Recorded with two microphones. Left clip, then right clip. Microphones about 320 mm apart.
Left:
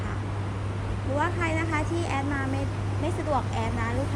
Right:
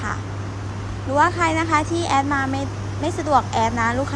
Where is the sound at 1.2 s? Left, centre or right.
Centre.